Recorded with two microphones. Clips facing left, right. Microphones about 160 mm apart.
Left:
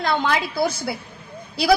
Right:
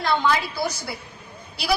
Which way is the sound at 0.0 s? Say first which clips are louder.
Even; 55° left (ahead or behind).